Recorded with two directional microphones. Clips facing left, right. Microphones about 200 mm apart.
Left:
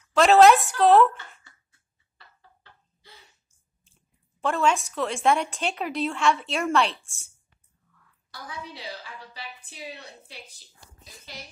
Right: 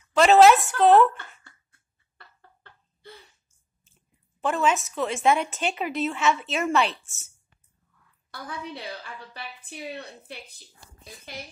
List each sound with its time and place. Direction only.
0.0 s a woman's voice: centre (ahead or behind)
1.4 s a sound: 55° right (ahead or behind)
3.8 s speech: centre (ahead or behind)
8.3 s a woman's voice: 60° right (ahead or behind)